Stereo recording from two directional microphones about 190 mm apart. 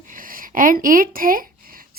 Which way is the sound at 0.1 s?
45° right (ahead or behind).